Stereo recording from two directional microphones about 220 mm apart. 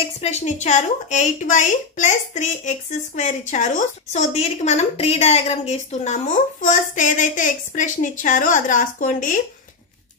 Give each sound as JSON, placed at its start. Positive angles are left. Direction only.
{"t": 0.0, "sound": "a woman's voice", "side_deg": 30}